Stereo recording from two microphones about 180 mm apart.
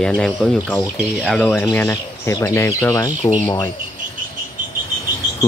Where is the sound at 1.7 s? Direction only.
15° left (ahead or behind).